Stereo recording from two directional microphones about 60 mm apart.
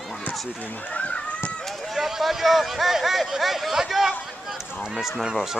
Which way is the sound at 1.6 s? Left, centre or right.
Centre.